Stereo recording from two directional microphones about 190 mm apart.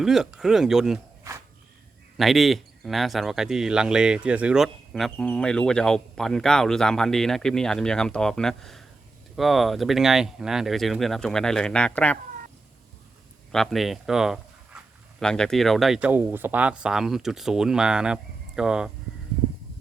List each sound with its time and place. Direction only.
0.0 s speech: centre (ahead or behind)
1.3 s a sound: 15° right (ahead or behind)
2.1 s speech: centre (ahead or behind)
13.5 s speech: centre (ahead or behind)